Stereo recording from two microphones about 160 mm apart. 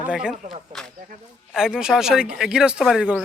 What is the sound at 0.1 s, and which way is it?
Speech, 5° right (ahead or behind).